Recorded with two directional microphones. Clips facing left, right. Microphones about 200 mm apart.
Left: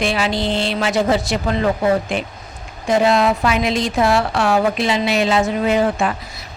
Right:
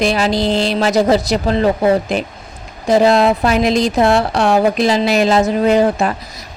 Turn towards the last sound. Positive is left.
turn(degrees=-40)  # may be behind; listen again after turning